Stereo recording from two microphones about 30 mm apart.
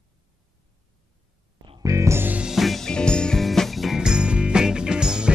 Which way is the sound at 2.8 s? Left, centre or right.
Left.